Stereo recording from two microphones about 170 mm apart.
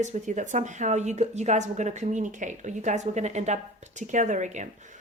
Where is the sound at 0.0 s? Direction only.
45° right (ahead or behind).